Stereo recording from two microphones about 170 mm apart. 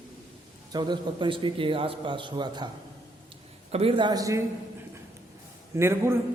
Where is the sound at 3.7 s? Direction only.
35° right (ahead or behind).